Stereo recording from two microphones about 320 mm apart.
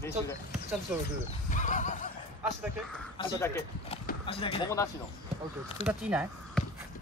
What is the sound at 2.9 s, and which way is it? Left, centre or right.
Speech, centre.